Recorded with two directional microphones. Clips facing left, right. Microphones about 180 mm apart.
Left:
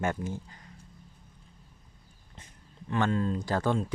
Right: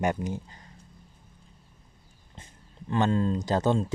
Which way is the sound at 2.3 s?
30° right (ahead or behind).